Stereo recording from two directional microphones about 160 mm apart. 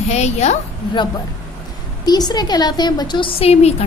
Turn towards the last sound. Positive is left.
turn(degrees=40)  # may be behind; listen again after turning